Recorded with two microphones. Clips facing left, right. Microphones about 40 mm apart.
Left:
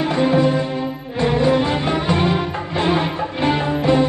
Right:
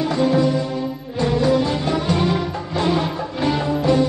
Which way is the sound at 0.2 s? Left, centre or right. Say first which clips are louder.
Left 2 dB; left.